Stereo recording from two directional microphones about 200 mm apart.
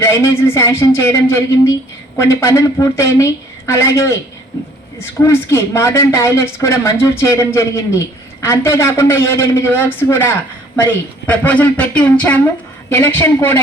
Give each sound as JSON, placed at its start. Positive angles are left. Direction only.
{"t": 0.0, "sound": "speech", "side_deg": 10}
{"t": 5.2, "sound": "speech", "side_deg": 15}